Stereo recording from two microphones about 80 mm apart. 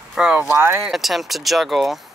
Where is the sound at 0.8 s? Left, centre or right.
Centre.